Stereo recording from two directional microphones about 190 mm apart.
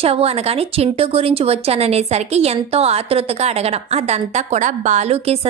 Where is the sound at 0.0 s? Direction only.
30° right (ahead or behind).